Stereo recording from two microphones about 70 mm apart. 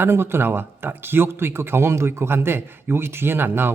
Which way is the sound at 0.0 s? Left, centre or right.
Right.